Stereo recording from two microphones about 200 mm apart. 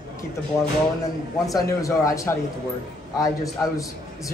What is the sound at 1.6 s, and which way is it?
Speech, 15° left (ahead or behind).